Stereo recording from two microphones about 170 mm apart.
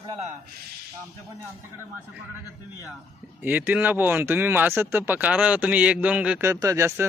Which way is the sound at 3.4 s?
10° right (ahead or behind).